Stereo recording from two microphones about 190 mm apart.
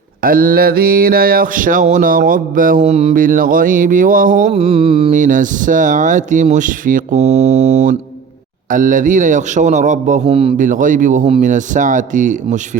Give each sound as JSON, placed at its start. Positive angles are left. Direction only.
{"t": 0.2, "sound": "a sound", "side_deg": -50}
{"t": 5.1, "sound": "speech", "side_deg": -45}
{"t": 10.7, "sound": "speech", "side_deg": -45}